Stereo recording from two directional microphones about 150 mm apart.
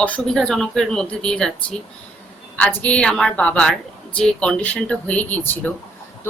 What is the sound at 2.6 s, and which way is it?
A woman's voice, 10° left (ahead or behind).